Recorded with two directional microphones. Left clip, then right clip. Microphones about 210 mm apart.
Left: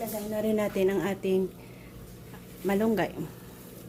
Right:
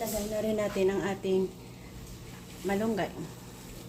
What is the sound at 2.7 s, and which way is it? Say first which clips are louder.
Dishes: left 4 dB; 35° left (ahead or behind).